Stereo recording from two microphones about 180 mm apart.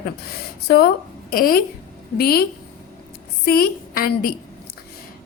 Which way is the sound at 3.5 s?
55° left (ahead or behind).